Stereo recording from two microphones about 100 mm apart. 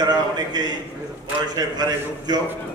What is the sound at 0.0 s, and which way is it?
A man's voice, 45° right (ahead or behind).